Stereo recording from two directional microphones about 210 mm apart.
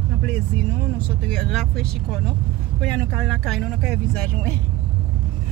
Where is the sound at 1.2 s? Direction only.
5° left (ahead or behind).